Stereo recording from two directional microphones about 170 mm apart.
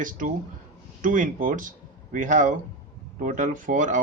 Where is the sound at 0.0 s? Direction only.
50° right (ahead or behind).